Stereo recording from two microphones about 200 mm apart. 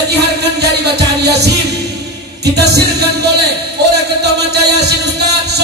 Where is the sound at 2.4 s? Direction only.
55° right (ahead or behind).